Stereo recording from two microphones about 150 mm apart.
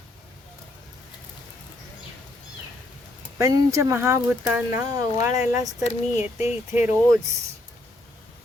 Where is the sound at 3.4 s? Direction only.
20° right (ahead or behind).